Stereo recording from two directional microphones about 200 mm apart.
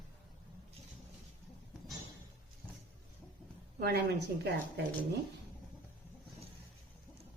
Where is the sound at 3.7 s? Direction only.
50° right (ahead or behind).